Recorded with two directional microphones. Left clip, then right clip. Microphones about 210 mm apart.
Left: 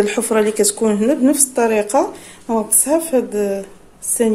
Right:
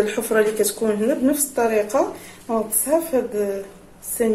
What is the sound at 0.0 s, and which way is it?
Speech, 45° left (ahead or behind).